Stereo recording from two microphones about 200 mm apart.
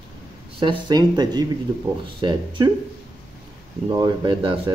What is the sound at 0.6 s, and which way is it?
Speech, 20° right (ahead or behind).